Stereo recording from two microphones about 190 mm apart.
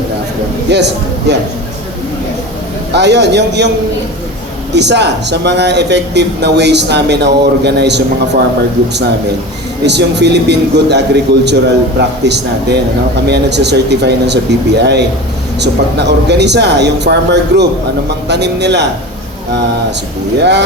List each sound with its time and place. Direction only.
0.7 s speech: 65° right (ahead or behind)
2.9 s speech: 65° right (ahead or behind)
4.7 s speech: 65° right (ahead or behind)
9.8 s speech: 65° right (ahead or behind)